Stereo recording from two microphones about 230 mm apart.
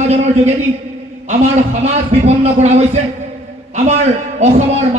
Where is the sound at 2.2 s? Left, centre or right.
Right.